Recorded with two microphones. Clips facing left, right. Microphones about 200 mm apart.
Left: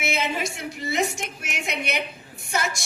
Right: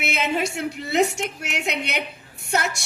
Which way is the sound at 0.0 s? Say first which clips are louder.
Right 2 dB; 65° right (ahead or behind).